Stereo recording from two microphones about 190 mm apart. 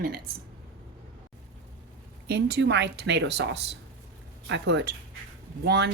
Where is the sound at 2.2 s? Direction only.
60° right (ahead or behind).